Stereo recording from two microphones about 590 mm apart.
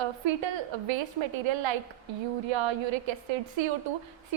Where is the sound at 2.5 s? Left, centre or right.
Right.